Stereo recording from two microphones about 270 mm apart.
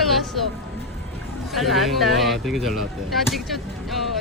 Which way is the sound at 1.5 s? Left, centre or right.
Centre.